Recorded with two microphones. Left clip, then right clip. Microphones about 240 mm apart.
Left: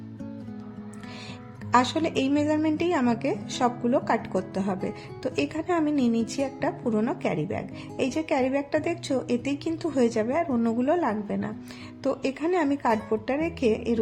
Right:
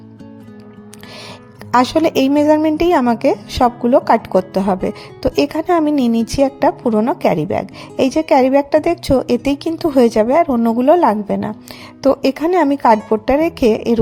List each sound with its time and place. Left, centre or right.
1.7 s a woman's voice: right